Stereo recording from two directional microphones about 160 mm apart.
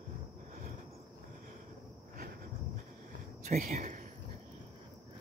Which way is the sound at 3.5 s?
55° right (ahead or behind).